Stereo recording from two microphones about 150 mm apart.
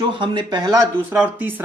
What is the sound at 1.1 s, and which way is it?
Speech, 10° right (ahead or behind).